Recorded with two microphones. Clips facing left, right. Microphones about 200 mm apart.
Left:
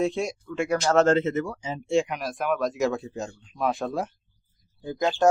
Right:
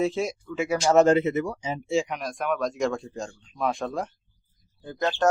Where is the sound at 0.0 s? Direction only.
Centre (ahead or behind).